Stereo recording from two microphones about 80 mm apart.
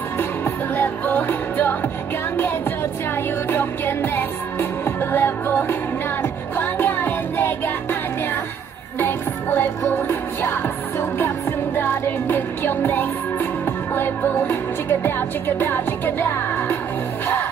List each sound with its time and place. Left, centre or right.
0.7 s music: left
3.4 s music: left
9.0 s music: left